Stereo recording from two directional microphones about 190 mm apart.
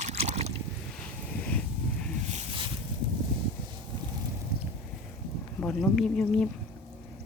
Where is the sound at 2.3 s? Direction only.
35° right (ahead or behind).